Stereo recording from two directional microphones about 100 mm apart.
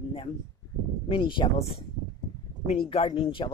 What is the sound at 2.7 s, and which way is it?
Speech, 65° left (ahead or behind).